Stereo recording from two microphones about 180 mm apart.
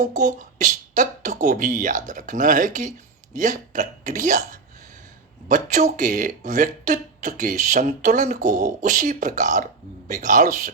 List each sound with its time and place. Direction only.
0.0 s speech: 45° right (ahead or behind)
5.5 s speech: 45° right (ahead or behind)